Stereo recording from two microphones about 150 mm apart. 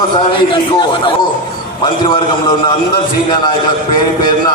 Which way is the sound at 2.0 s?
35° left (ahead or behind).